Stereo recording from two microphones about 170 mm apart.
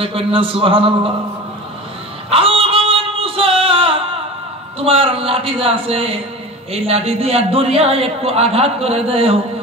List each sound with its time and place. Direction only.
0.0 s a man's voice: 30° right (ahead or behind)
2.2 s music: 35° right (ahead or behind)
4.7 s a man's voice: 35° right (ahead or behind)